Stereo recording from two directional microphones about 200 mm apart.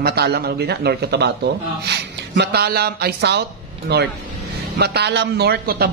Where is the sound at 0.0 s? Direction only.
50° right (ahead or behind).